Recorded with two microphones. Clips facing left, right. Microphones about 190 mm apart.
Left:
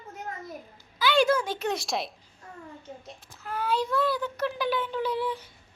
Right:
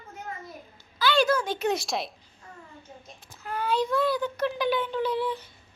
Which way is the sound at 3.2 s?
Centre (ahead or behind).